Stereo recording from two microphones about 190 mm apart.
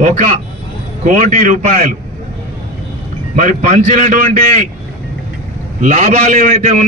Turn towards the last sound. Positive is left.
turn(degrees=-40)  # may be behind; listen again after turning